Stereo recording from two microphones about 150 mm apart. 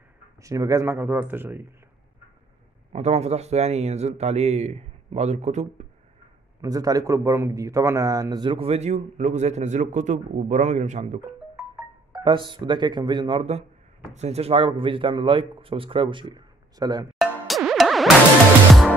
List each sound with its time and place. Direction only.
0.4 s speech: 20° right (ahead or behind)
2.9 s speech: 45° right (ahead or behind)
6.6 s speech: 25° right (ahead or behind); by 11.1 s 50° right (ahead or behind)
11.7 s speech: 30° right (ahead or behind)
17.2 s music: centre (ahead or behind)